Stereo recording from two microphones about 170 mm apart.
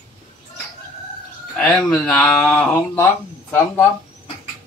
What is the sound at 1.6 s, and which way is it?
Speech, 5° left (ahead or behind).